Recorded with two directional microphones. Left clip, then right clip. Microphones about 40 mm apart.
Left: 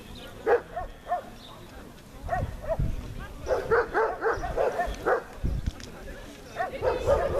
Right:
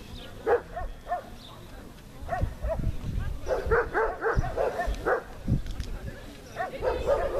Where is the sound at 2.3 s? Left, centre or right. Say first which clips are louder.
Left 2 dB; right.